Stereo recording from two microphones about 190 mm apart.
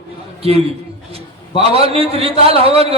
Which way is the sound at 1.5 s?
30° right (ahead or behind).